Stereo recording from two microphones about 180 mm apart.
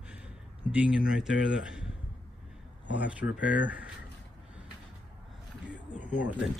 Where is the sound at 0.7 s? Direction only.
5° right (ahead or behind).